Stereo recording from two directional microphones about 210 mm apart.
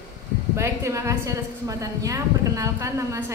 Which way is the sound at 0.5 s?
15° right (ahead or behind).